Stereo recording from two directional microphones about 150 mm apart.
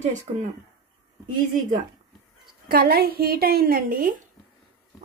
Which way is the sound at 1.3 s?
55° right (ahead or behind).